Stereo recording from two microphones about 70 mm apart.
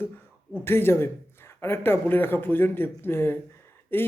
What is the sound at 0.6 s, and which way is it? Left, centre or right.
Speech, left.